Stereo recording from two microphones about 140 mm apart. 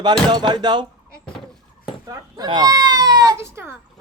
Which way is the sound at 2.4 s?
30° right (ahead or behind).